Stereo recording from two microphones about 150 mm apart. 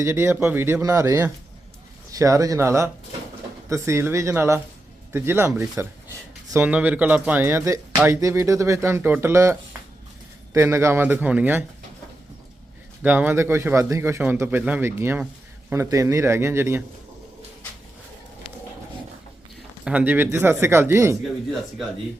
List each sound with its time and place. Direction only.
0.0 s speech: 15° right (ahead or behind)
6.6 s speech: 10° right (ahead or behind)
13.0 s speech: 10° right (ahead or behind)
19.8 s speech: 10° right (ahead or behind)